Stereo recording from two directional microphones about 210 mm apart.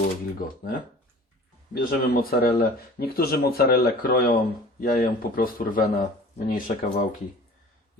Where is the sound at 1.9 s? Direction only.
45° left (ahead or behind).